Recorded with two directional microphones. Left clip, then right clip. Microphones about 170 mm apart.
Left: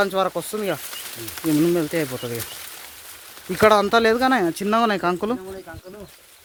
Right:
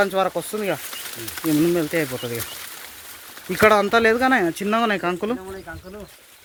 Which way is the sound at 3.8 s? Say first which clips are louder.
Even; 25° left (ahead or behind).